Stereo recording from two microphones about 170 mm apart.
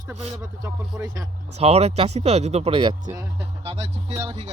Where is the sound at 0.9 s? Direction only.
20° right (ahead or behind).